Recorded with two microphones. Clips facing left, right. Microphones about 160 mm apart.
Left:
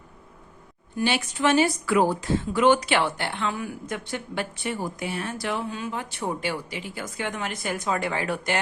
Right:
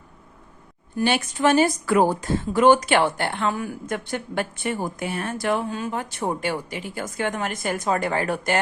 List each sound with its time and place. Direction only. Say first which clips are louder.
0.9 s speech: right 3 dB; 45° right (ahead or behind)